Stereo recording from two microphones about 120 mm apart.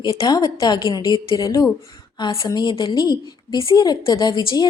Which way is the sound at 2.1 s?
40° left (ahead or behind).